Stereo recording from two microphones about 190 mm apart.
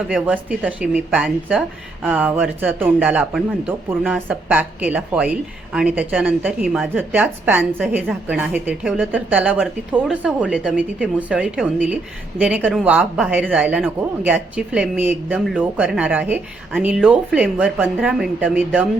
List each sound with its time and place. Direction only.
0.1 s speech: 5° right (ahead or behind)